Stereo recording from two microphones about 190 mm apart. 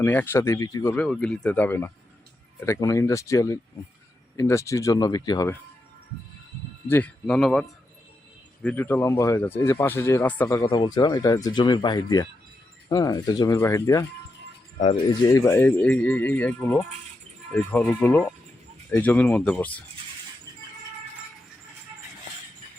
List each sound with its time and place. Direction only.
0.0 s speech: 10° left (ahead or behind)
6.8 s speech: 10° left (ahead or behind)
10.6 s speech: 25° left (ahead or behind)
15.3 s speech: 15° left (ahead or behind)